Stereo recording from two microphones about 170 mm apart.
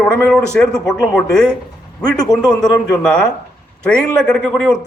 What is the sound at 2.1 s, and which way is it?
Speech, 20° left (ahead or behind).